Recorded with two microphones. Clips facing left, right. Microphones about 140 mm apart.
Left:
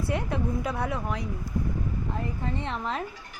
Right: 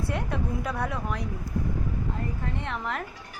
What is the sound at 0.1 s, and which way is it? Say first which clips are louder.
Speech: left 4 dB; 5° left (ahead or behind).